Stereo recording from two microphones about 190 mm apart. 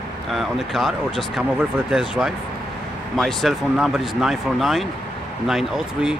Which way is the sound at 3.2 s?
Centre (ahead or behind).